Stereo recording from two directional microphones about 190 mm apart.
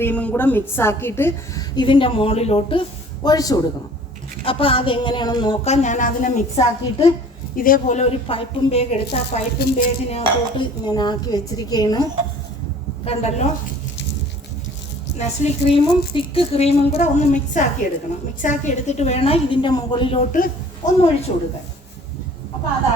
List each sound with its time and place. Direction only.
0.0 s a woman's voice: 5° left (ahead or behind)
5.6 s speech: 35° left (ahead or behind)
7.5 s speech: 45° left (ahead or behind)
9.6 s a woman's voice: 45° left (ahead or behind)
10.1 s a woman's voice: 30° left (ahead or behind)
13.1 s speech: 35° left (ahead or behind)
15.2 s speech: 35° left (ahead or behind)
20.3 s a woman's voice: 45° left (ahead or behind)
21.0 s speech: 35° left (ahead or behind)